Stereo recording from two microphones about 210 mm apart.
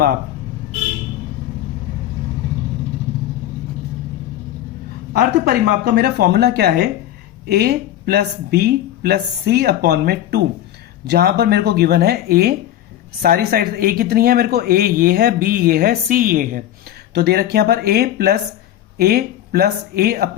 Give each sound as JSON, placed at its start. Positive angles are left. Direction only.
{"t": 5.1, "sound": "speech", "side_deg": -50}